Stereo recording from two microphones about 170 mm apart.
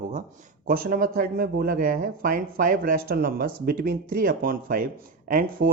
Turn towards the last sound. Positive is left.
turn(degrees=-55)  # may be behind; listen again after turning